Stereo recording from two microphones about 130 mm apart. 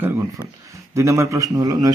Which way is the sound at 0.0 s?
15° right (ahead or behind).